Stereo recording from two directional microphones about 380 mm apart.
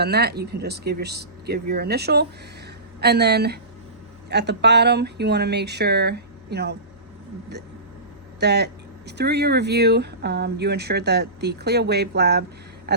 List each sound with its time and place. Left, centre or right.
0.0 s speech: right
8.4 s speech: right